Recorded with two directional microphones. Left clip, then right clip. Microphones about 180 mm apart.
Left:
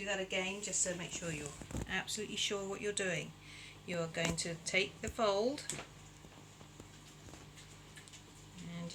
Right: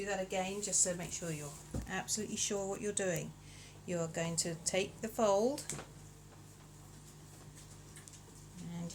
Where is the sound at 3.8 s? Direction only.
40° right (ahead or behind).